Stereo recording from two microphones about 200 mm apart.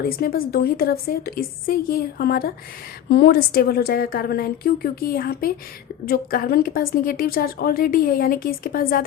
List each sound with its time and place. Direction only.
0.0 s a woman's voice: 50° left (ahead or behind)